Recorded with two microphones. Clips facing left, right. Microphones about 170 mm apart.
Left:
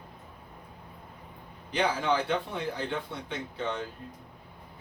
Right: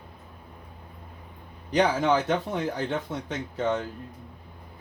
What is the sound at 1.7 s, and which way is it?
Speech, 45° right (ahead or behind).